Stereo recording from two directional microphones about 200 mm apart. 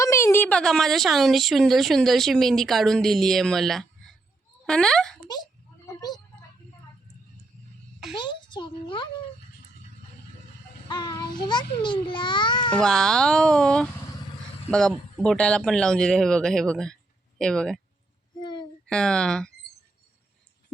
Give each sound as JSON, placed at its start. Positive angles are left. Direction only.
{"t": 0.0, "sound": "speech", "side_deg": 15}
{"t": 5.9, "sound": "a sound", "side_deg": 20}
{"t": 8.1, "sound": "a child's voice", "side_deg": 25}
{"t": 10.8, "sound": "a child's voice", "side_deg": 20}
{"t": 12.7, "sound": "speech", "side_deg": 5}
{"t": 18.3, "sound": "a sound", "side_deg": 20}
{"t": 18.9, "sound": "speech", "side_deg": 5}